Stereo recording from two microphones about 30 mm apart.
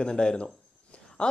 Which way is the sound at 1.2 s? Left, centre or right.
Left.